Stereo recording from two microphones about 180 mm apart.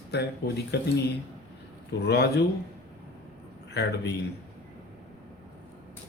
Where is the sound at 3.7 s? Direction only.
65° left (ahead or behind).